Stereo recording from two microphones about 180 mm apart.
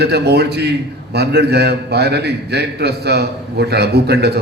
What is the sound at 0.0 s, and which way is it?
A man's voice, 65° right (ahead or behind).